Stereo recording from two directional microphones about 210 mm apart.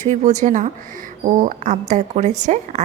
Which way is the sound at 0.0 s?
35° right (ahead or behind).